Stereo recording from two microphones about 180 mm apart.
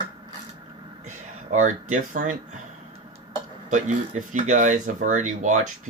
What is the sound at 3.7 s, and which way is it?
Speech, 45° right (ahead or behind).